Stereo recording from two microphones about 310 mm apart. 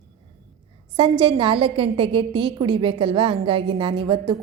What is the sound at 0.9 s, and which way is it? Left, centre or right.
A woman's voice, centre.